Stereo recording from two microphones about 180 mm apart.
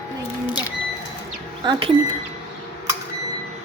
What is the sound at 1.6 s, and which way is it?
Speech, 25° right (ahead or behind).